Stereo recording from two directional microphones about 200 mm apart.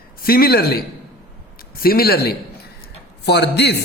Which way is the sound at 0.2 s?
50° left (ahead or behind).